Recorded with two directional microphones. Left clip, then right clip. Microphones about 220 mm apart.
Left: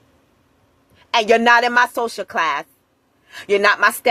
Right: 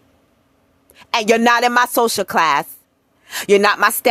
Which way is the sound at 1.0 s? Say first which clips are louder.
Even; 60° right (ahead or behind).